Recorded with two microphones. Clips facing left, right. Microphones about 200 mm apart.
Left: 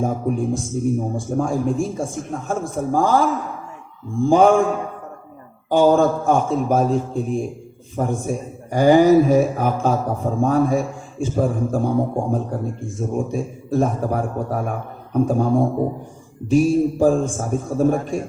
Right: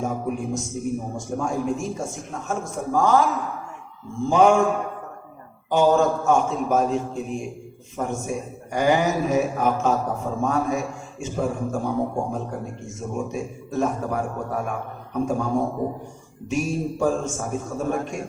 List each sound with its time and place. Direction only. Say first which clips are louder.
0.0 s a man's voice: left 5 dB; 30° left (ahead or behind)
5.7 s a man's voice: left 4 dB; 30° left (ahead or behind)